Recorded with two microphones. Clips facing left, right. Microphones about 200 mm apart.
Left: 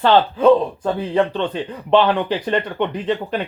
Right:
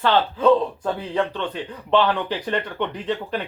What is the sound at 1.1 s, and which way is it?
Speech, 25° left (ahead or behind).